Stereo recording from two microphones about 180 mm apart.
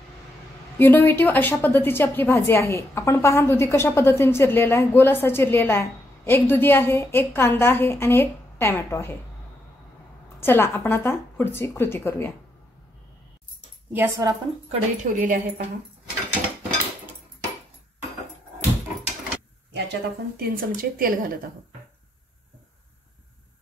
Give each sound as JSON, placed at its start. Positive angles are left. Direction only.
{"t": 0.7, "sound": "a woman's voice", "side_deg": 10}
{"t": 10.4, "sound": "a woman's voice", "side_deg": 15}
{"t": 13.9, "sound": "a woman's voice", "side_deg": -15}
{"t": 14.7, "sound": "speech", "side_deg": -45}
{"t": 19.7, "sound": "speech", "side_deg": -60}